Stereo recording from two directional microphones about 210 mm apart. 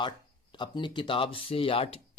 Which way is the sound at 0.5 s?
20° left (ahead or behind).